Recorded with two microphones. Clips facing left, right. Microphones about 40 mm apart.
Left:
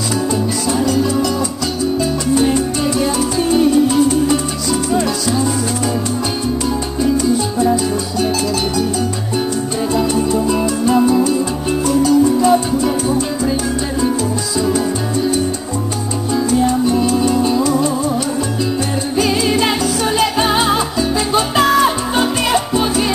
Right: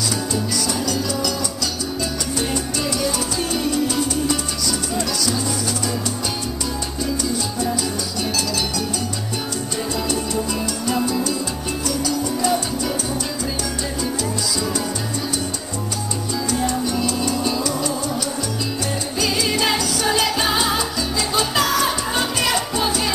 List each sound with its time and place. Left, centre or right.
0.7 s music: left
2.5 s music: left
7.5 s music: left
9.9 s music: left
16.4 s music: left
19.1 s music: left